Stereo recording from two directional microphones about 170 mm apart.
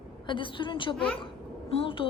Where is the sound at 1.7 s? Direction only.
35° left (ahead or behind).